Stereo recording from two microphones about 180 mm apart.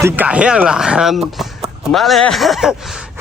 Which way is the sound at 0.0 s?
10° right (ahead or behind).